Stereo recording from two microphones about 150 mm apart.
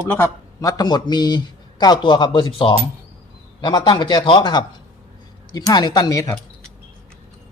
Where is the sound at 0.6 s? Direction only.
25° left (ahead or behind).